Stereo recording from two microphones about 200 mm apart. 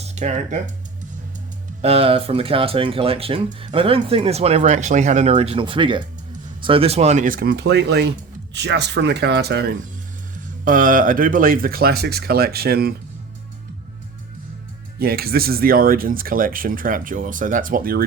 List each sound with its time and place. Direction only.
0.0 s speech: 35° right (ahead or behind)
1.8 s speech: 30° right (ahead or behind); by 9.7 s 55° right (ahead or behind)
10.7 s speech: 45° right (ahead or behind)
14.9 s speech: 50° right (ahead or behind)